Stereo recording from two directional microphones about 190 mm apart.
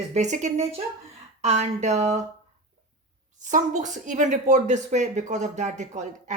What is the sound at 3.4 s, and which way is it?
Speech, 40° right (ahead or behind).